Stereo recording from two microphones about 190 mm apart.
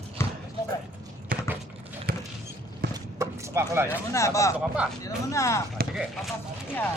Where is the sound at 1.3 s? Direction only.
50° right (ahead or behind).